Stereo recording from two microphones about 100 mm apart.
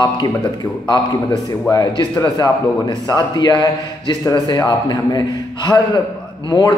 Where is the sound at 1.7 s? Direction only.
40° left (ahead or behind).